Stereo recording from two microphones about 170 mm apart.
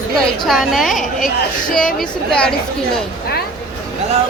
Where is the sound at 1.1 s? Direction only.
55° left (ahead or behind).